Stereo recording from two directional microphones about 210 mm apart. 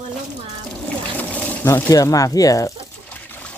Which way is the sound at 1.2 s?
5° left (ahead or behind).